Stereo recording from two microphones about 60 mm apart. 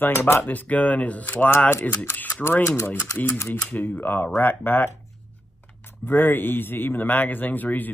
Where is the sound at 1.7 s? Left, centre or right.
Left.